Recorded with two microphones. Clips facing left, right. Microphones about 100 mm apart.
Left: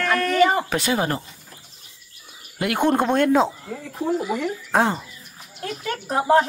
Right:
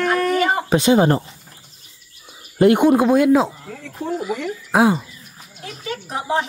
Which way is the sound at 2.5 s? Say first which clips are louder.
Right 11 dB; 30° right (ahead or behind).